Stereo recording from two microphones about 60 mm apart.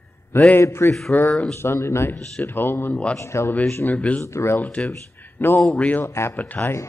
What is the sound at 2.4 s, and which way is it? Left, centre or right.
Speech, left.